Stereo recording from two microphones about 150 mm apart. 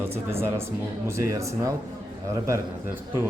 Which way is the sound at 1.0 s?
20° right (ahead or behind).